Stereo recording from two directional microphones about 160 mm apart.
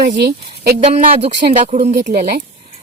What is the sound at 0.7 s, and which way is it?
Speech, 40° right (ahead or behind).